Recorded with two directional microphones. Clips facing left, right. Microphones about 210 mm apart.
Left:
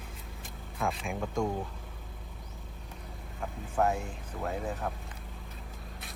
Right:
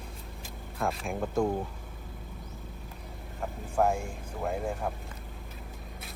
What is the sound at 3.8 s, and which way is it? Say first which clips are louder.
Speech: right 2 dB; 5° right (ahead or behind).